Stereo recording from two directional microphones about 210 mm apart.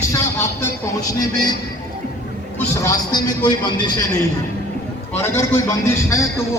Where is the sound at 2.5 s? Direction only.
15° left (ahead or behind).